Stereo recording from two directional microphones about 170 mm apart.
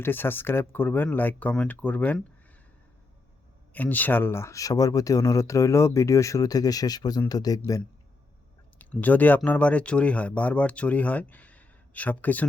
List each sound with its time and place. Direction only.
0.0 s speech: 10° left (ahead or behind)
3.7 s speech: 10° left (ahead or behind)
8.8 s speech: 10° left (ahead or behind)